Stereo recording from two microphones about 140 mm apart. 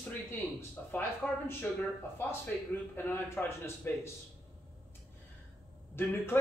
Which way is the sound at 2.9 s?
15° left (ahead or behind).